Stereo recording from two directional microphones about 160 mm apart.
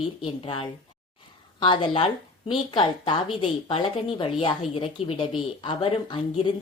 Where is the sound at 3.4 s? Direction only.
35° left (ahead or behind).